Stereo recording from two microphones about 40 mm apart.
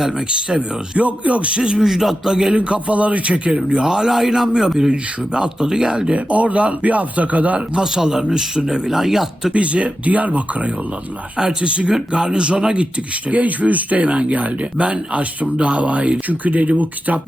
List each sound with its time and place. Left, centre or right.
0.0 s speech: centre
0.3 s speech: right
1.9 s speech: centre
2.5 s speech: right
3.7 s speech: centre
6.1 s speech: right
7.7 s speech: centre
9.5 s speech: right